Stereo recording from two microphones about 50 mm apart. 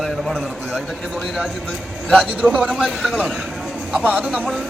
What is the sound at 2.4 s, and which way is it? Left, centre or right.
Speech, left.